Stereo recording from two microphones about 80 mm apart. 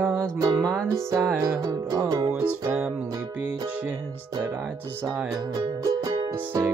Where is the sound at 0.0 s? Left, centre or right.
Right.